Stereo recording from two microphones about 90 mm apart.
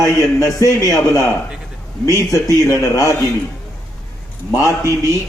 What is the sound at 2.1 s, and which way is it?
A man's voice, 35° left (ahead or behind).